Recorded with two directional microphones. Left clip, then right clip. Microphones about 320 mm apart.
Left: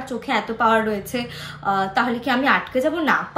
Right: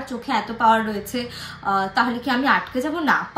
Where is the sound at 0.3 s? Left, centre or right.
Centre.